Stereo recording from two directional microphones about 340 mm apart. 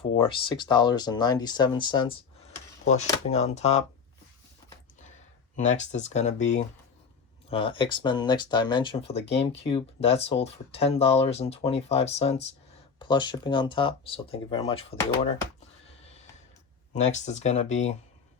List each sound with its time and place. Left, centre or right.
0.0 s speech: centre
3.2 s speech: centre
5.5 s speech: left
16.9 s speech: centre